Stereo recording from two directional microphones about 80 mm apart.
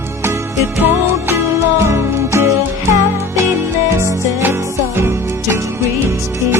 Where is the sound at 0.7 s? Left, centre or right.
Right.